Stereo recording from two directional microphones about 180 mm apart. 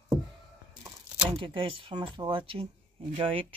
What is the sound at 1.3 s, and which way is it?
Speech, 30° right (ahead or behind).